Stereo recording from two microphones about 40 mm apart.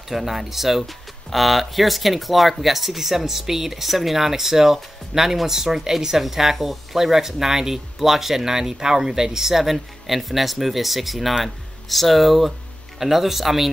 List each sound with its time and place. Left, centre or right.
0.1 s a man's voice: centre